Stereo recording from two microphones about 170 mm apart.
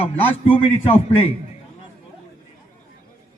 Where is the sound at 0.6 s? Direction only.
35° left (ahead or behind).